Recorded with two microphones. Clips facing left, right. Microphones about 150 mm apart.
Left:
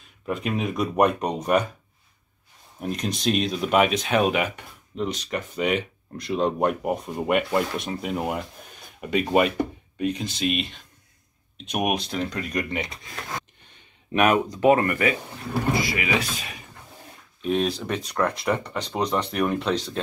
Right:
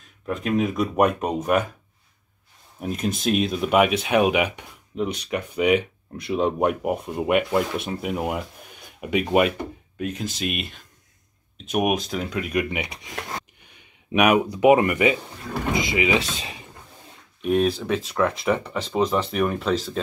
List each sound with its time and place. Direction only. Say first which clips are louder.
0.2 s speech: right 3 dB; centre (ahead or behind)
2.8 s speech: right 1 dB; 5° right (ahead or behind); by 16.6 s 25° right (ahead or behind)
17.4 s speech: right 3 dB; 5° right (ahead or behind)